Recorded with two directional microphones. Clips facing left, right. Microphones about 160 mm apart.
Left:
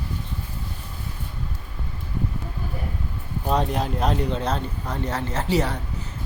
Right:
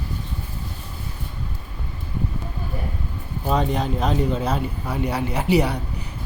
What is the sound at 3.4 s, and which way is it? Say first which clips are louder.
A man's voice: right 1 dB; centre (ahead or behind).